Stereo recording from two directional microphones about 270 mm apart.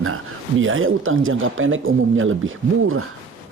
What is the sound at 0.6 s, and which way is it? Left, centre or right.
Speech, right.